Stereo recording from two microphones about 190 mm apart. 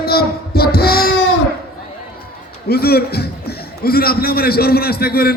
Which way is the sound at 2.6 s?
55° left (ahead or behind).